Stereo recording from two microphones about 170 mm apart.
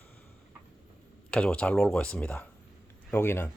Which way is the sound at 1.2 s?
5° left (ahead or behind).